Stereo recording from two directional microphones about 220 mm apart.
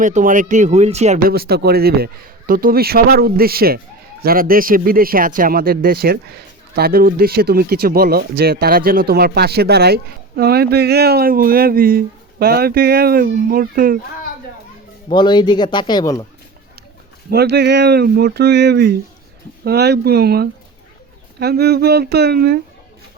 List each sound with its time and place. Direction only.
0.0 s speech: 35° right (ahead or behind)
1.3 s speech: 45° right (ahead or behind)
15.1 s speech: 20° left (ahead or behind)
17.3 s speech: 50° right (ahead or behind)